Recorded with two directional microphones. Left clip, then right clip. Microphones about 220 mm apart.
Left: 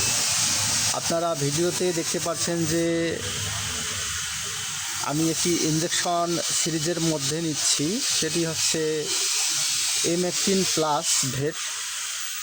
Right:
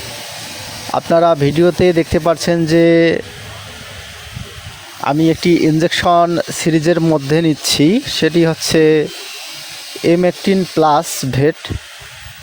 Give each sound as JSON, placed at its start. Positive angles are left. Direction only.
{"t": 0.9, "sound": "speech", "side_deg": -35}
{"t": 5.0, "sound": "speech", "side_deg": -35}
{"t": 10.1, "sound": "speech", "side_deg": -35}